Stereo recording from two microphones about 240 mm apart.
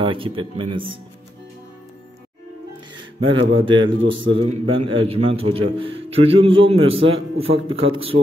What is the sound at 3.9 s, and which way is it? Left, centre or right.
Speech, right.